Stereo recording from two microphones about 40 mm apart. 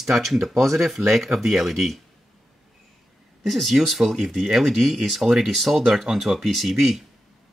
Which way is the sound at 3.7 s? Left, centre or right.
Centre.